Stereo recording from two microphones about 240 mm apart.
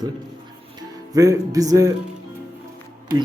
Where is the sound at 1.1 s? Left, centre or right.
Centre.